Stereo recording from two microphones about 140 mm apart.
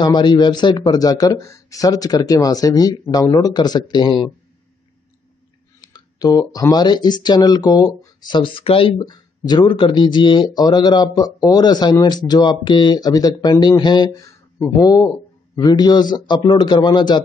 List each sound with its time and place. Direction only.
0.0 s speech: 30° left (ahead or behind)
5.8 s speech: 30° left (ahead or behind)